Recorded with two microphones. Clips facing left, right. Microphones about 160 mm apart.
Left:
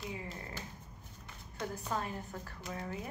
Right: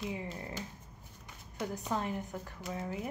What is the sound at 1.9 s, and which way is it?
Clapping, 20° right (ahead or behind).